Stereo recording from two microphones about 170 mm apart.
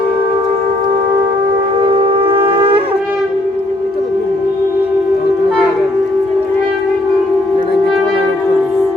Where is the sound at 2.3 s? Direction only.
30° right (ahead or behind).